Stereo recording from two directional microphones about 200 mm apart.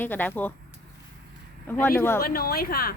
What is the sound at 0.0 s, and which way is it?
Speech, 10° left (ahead or behind).